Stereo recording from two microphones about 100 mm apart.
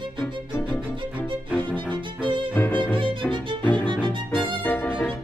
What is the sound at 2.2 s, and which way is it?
Violin, 55° right (ahead or behind).